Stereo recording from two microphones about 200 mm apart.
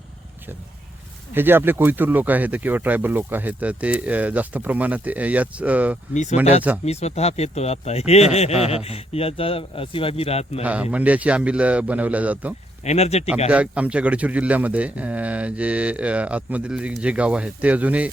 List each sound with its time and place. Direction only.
1.3 s speech: 10° right (ahead or behind)
6.8 s a man's voice: 30° left (ahead or behind)
10.6 s speech: 5° right (ahead or behind)
12.8 s speech: 35° left (ahead or behind)
13.5 s speech: 5° right (ahead or behind)